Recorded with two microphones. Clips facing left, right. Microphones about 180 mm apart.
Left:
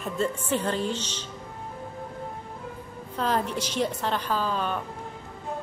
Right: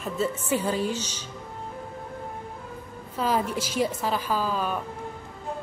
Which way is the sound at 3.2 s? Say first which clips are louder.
Right 1 dB; 10° right (ahead or behind).